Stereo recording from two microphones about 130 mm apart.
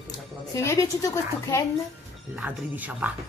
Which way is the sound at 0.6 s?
25° left (ahead or behind).